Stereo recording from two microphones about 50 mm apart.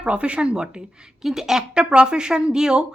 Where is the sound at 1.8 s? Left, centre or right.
Centre.